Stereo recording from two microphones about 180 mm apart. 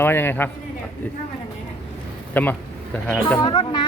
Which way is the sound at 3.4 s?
25° left (ahead or behind).